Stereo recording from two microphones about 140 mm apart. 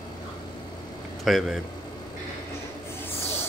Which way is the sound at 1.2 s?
Centre (ahead or behind).